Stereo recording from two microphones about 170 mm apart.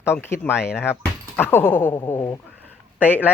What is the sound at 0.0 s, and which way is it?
Speech, 15° left (ahead or behind).